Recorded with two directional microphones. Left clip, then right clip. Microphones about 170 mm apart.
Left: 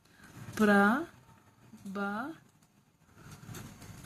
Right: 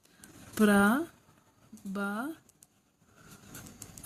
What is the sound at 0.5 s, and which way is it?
Speech, 35° right (ahead or behind).